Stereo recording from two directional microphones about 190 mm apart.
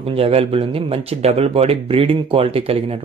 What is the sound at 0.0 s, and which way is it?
Speech, 30° right (ahead or behind).